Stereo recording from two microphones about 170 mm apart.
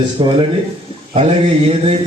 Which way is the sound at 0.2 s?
30° right (ahead or behind).